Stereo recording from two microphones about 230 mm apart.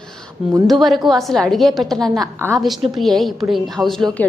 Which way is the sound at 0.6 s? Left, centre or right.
Centre.